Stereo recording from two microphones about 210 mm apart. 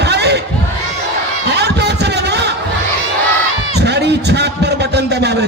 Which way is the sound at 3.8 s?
55° right (ahead or behind).